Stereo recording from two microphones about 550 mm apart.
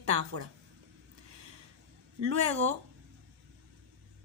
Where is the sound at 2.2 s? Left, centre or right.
Right.